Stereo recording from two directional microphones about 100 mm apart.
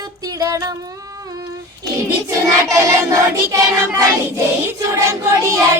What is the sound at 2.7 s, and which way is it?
Child singing, 30° right (ahead or behind).